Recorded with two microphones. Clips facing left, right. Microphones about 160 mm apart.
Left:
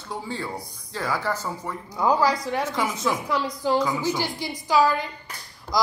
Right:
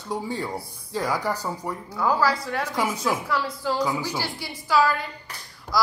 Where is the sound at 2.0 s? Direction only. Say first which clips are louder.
Left 2 dB; 15° left (ahead or behind).